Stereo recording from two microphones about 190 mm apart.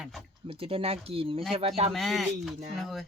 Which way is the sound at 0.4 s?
30° right (ahead or behind).